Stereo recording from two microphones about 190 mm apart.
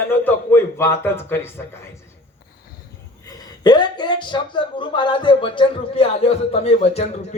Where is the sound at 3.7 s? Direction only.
25° left (ahead or behind).